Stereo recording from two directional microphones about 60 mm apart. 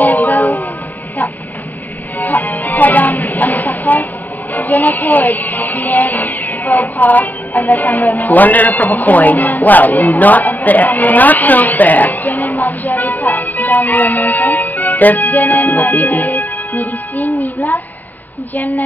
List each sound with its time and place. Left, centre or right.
0.0 s music: left
2.1 s music: left
4.6 s speech: left